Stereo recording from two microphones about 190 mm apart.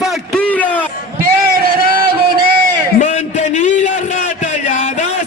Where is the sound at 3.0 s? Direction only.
40° left (ahead or behind).